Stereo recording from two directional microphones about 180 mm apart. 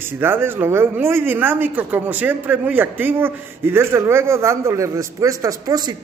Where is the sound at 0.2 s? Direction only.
10° right (ahead or behind).